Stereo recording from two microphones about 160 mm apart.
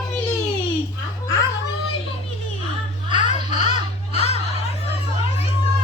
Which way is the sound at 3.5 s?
45° left (ahead or behind).